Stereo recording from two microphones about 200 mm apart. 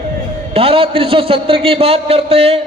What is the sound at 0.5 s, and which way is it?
A man's voice, 30° right (ahead or behind).